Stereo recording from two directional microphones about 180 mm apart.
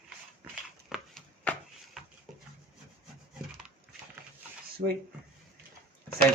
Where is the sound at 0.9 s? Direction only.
Centre (ahead or behind).